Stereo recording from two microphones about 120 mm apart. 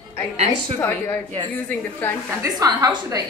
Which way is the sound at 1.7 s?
15° left (ahead or behind).